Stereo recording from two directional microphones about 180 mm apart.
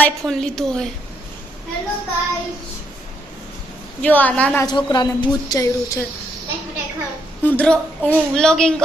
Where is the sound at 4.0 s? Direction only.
10° left (ahead or behind).